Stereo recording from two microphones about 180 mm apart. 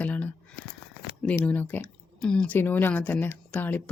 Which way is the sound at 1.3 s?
10° left (ahead or behind).